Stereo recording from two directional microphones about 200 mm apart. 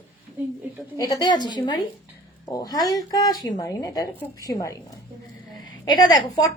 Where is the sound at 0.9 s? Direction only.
15° left (ahead or behind).